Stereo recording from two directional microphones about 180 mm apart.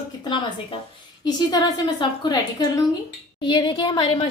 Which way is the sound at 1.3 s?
20° left (ahead or behind).